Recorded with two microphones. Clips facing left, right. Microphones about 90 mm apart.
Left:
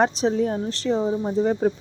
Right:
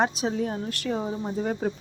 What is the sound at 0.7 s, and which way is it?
Speech, 25° left (ahead or behind).